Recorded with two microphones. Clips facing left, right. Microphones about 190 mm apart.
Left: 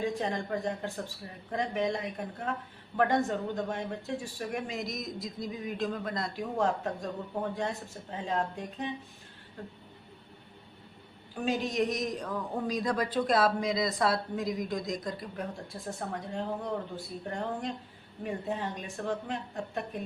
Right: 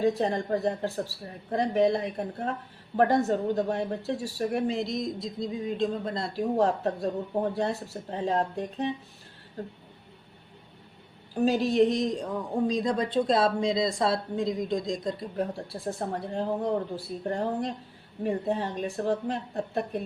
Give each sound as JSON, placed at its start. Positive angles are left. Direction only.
{"t": 0.0, "sound": "speech", "side_deg": -35}
{"t": 11.3, "sound": "a man's voice", "side_deg": -35}
{"t": 15.4, "sound": "speech", "side_deg": -35}